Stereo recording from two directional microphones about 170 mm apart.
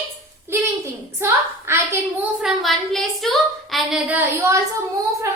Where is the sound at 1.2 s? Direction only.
15° right (ahead or behind).